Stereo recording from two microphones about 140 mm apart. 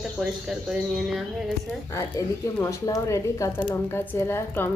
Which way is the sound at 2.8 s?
25° left (ahead or behind).